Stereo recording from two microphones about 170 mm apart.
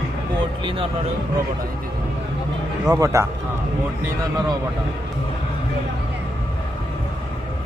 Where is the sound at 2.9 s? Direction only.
15° right (ahead or behind).